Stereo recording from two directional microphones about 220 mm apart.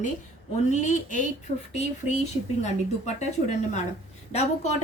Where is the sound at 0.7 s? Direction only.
35° left (ahead or behind).